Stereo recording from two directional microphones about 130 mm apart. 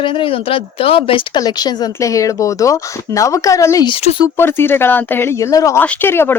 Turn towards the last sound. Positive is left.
turn(degrees=15)  # may be behind; listen again after turning